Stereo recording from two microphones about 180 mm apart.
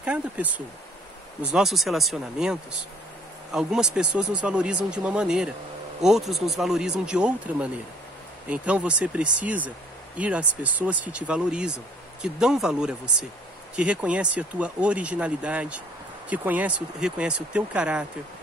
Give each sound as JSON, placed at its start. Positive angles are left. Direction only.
{"t": 0.0, "sound": "speech", "side_deg": -10}